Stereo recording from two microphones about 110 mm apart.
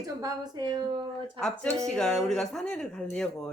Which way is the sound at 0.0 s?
35° right (ahead or behind).